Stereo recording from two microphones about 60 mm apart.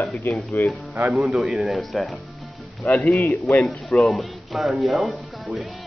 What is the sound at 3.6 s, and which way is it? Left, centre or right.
Speech, centre.